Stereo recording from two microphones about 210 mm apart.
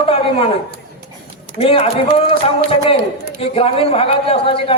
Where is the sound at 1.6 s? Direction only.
25° left (ahead or behind).